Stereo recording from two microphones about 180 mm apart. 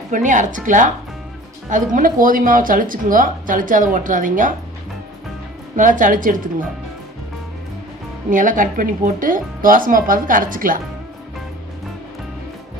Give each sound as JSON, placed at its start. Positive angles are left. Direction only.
{"t": 0.1, "sound": "speech", "side_deg": -45}
{"t": 5.7, "sound": "speech", "side_deg": -45}
{"t": 8.3, "sound": "speech", "side_deg": -45}